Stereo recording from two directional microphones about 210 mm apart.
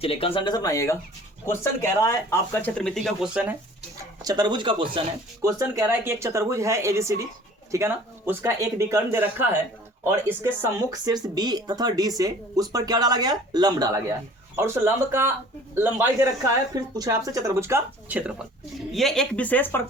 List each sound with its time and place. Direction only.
0.0 s speech: 25° left (ahead or behind); by 3.5 s centre (ahead or behind)
4.2 s speech: 20° right (ahead or behind); by 19.8 s 10° left (ahead or behind)